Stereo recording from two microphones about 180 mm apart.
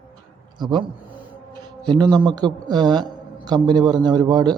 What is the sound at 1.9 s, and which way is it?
A man's voice, 25° right (ahead or behind).